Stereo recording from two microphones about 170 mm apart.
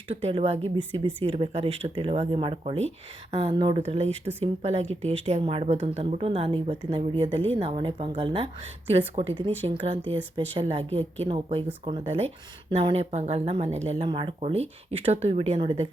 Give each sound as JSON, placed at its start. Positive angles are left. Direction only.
{"t": 0.1, "sound": "a woman's voice", "side_deg": -35}